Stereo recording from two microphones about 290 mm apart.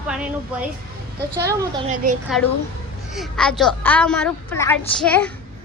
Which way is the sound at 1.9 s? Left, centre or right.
Right.